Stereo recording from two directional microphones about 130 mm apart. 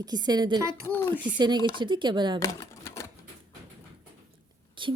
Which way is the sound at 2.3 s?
25° left (ahead or behind).